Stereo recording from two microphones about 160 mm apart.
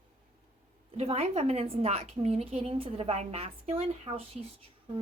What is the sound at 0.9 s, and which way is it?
A woman's voice, 40° right (ahead or behind).